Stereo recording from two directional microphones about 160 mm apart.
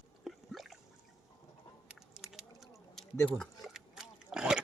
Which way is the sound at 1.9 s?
5° right (ahead or behind).